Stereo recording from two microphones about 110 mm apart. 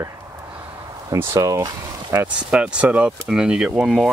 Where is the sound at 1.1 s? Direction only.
30° right (ahead or behind).